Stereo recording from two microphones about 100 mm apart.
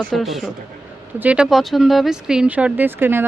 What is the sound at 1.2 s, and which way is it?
Speech, 15° right (ahead or behind).